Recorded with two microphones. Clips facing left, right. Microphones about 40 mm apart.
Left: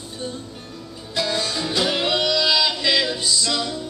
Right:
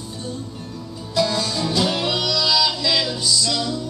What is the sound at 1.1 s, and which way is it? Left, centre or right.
Music, centre.